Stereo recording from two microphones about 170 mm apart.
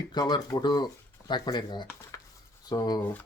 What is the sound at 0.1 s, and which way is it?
Speech, 25° left (ahead or behind).